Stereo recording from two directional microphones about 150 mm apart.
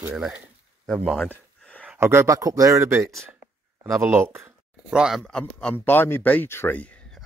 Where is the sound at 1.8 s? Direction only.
15° right (ahead or behind).